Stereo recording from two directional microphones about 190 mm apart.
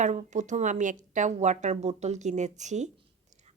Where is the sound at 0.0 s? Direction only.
40° right (ahead or behind).